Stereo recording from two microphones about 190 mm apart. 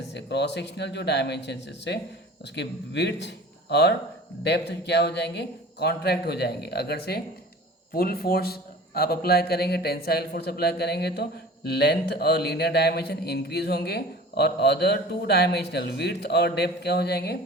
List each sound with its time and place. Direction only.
0.1 s a man's voice: 65° left (ahead or behind)